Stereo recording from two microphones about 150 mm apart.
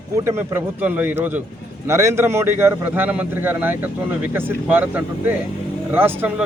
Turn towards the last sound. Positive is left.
turn(degrees=-10)  # may be behind; listen again after turning